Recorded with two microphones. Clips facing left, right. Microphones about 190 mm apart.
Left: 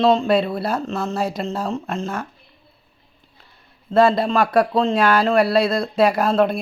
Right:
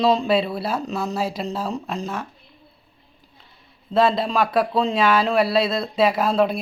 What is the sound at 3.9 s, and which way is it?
Speech, centre (ahead or behind).